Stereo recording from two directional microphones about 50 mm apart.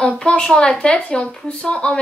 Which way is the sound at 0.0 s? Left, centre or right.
Centre.